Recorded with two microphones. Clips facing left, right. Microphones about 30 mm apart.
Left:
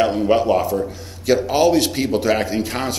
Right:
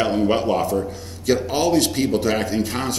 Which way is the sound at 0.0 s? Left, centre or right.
Centre.